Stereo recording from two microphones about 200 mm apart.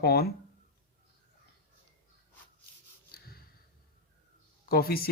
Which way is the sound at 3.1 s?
50° left (ahead or behind).